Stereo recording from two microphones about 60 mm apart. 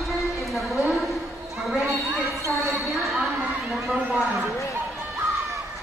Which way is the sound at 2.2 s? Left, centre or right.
Right.